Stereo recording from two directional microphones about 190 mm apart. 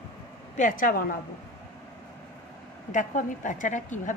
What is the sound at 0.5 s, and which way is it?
Speech, 45° left (ahead or behind).